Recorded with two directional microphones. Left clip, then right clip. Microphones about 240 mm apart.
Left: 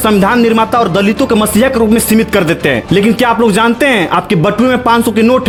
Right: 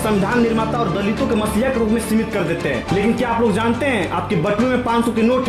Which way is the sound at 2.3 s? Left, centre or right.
Left.